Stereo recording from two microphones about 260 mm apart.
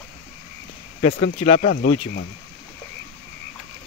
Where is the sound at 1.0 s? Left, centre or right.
Left.